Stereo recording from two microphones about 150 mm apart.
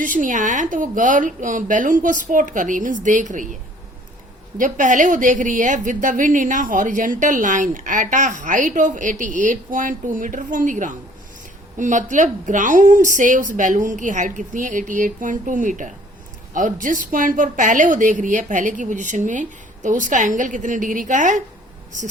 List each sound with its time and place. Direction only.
0.0 s a woman's voice: 60° right (ahead or behind)
4.5 s a woman's voice: 60° right (ahead or behind)